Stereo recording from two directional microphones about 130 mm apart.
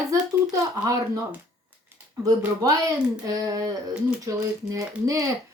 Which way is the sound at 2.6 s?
25° right (ahead or behind).